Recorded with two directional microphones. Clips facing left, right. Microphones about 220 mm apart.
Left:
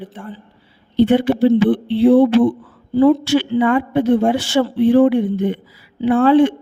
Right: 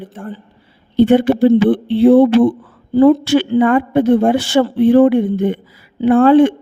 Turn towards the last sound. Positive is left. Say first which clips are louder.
# right 3 dB
turn(degrees=-50)  # may be behind; listen again after turning